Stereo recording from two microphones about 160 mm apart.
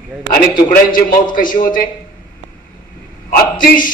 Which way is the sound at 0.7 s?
60° left (ahead or behind).